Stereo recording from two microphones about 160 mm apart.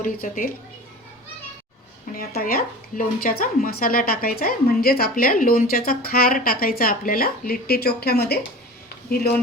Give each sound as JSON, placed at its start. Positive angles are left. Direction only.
{"t": 0.0, "sound": "speech", "side_deg": 60}
{"t": 2.1, "sound": "speech", "side_deg": 65}